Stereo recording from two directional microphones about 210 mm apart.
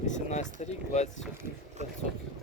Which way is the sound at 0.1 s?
35° left (ahead or behind).